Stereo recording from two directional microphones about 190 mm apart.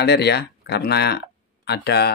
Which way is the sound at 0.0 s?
60° left (ahead or behind).